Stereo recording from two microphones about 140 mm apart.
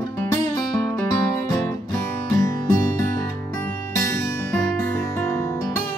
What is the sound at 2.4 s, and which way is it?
Music, 20° left (ahead or behind).